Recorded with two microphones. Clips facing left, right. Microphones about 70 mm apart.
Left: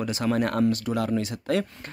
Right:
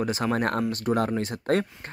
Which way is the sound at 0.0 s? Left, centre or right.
Right.